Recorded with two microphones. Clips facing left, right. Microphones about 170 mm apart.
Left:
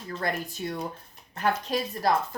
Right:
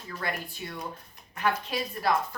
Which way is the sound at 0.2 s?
40° left (ahead or behind).